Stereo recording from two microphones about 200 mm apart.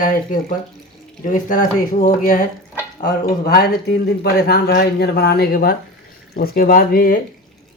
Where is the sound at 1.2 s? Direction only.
40° left (ahead or behind).